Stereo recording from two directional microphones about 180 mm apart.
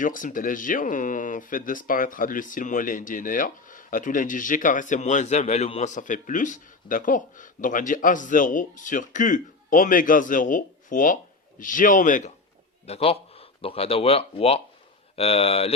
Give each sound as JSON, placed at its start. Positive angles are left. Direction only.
{"t": 0.0, "sound": "speech", "side_deg": 45}
{"t": 12.9, "sound": "speech", "side_deg": 30}